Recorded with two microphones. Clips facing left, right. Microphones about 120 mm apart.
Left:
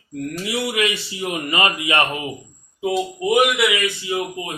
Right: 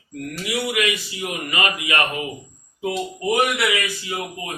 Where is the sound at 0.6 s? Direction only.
30° left (ahead or behind).